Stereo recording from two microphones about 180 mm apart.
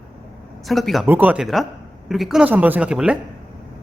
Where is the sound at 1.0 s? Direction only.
10° right (ahead or behind).